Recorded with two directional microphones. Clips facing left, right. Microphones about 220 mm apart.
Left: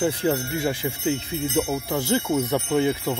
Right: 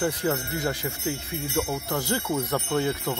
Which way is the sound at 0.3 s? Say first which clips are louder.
Left 4 dB; 10° left (ahead or behind).